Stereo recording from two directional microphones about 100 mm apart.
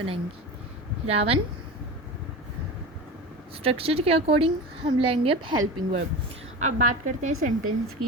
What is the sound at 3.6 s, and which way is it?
A woman's voice, 75° right (ahead or behind).